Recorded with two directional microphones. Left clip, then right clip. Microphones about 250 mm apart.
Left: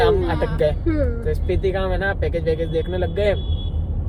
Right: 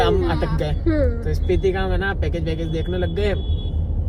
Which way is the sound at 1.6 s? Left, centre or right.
Left.